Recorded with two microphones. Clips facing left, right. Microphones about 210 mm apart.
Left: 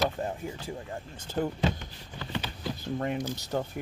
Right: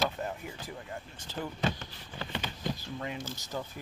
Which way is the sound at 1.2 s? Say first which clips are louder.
Left 5 dB; 50° left (ahead or behind).